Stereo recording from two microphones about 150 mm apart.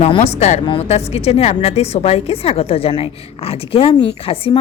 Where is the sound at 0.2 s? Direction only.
45° left (ahead or behind).